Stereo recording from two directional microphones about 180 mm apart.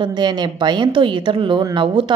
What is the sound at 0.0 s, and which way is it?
A woman's voice, 25° right (ahead or behind).